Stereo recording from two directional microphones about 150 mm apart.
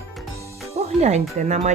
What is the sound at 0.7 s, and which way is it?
Music, 45° right (ahead or behind).